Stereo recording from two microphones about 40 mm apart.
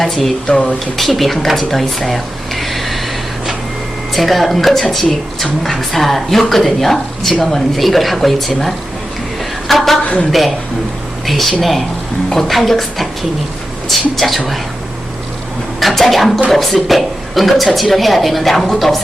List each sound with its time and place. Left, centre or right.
0.0 s speech: centre
0.4 s speech: left
0.9 s speech: centre
4.1 s speech: centre
9.6 s a sound: centre
11.3 s speech: centre
15.8 s speech: centre